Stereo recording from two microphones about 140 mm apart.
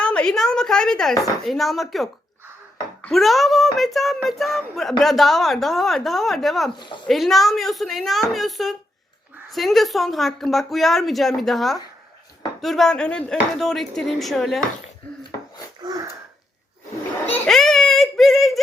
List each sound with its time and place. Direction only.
0.0 s a woman's voice: 5° left (ahead or behind)
6.7 s speech: 35° left (ahead or behind)
7.1 s speech: centre (ahead or behind)
15.8 s wheeze: 30° right (ahead or behind)
17.3 s a sound: 5° left (ahead or behind)